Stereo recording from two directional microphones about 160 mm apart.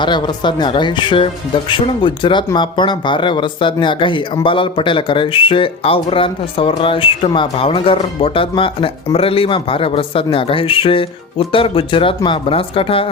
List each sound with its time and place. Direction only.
0.0 s speech: 30° left (ahead or behind)